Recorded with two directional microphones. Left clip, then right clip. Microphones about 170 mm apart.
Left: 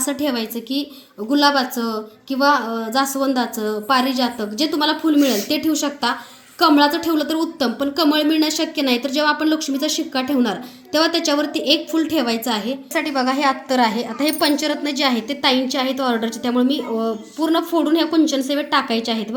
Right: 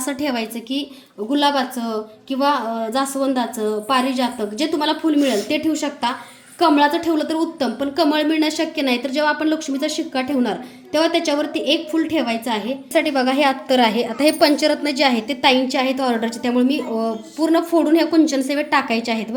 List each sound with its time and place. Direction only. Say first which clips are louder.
0.0 s a woman's voice: left 1 dB; 15° right (ahead or behind)
12.9 s a woman's voice: right 3 dB; 15° right (ahead or behind)